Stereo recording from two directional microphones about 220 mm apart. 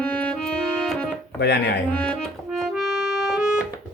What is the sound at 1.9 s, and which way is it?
Music, 5° left (ahead or behind).